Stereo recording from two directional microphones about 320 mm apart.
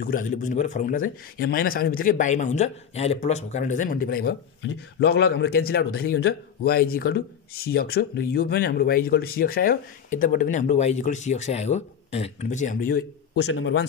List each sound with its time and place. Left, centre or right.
0.0 s a man's voice: left